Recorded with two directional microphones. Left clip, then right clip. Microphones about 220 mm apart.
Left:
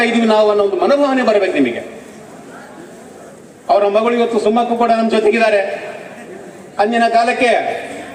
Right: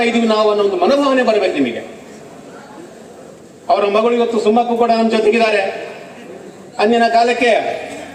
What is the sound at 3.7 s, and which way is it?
A man's voice, 55° left (ahead or behind).